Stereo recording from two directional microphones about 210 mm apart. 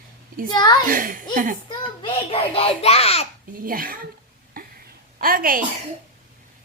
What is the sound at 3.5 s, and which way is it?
Speech, 40° right (ahead or behind).